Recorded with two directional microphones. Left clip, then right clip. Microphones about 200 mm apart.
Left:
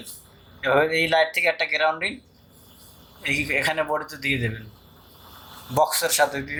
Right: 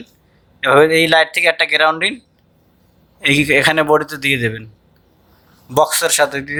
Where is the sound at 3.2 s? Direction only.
45° right (ahead or behind).